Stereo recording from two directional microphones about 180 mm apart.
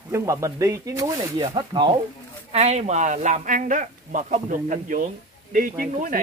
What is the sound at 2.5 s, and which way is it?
Speech, 40° right (ahead or behind).